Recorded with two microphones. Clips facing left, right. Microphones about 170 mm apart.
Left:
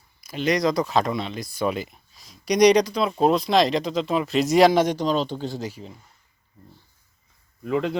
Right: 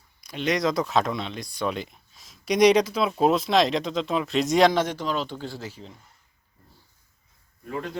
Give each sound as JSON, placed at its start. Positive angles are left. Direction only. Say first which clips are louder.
{"t": 0.2, "sound": "speech", "louder": "left 3 dB", "side_deg": 0}
{"t": 7.6, "sound": "speech", "louder": "left 8 dB", "side_deg": 90}